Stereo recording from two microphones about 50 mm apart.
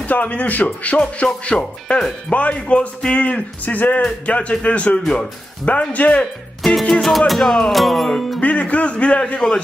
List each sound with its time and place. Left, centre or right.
0.0 s speech: left
2.0 s speech: centre
2.3 s speech: left
3.6 s speech: left
4.0 s speech: left
6.6 s music: centre
7.4 s speech: centre
7.7 s music: centre
8.4 s speech: left